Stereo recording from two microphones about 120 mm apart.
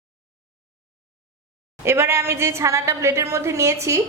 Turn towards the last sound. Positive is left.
turn(degrees=-25)  # may be behind; listen again after turning